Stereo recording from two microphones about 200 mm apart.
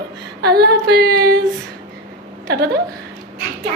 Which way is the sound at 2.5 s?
55° right (ahead or behind).